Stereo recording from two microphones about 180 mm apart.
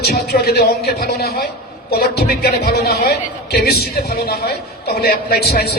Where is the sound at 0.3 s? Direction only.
60° left (ahead or behind).